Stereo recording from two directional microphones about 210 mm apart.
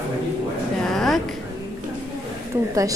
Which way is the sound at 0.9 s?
Centre (ahead or behind).